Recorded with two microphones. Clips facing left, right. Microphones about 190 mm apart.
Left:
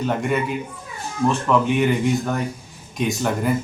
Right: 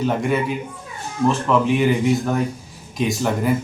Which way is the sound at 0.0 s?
Centre (ahead or behind).